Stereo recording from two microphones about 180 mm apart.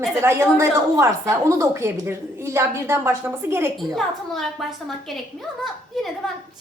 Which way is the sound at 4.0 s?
Centre (ahead or behind).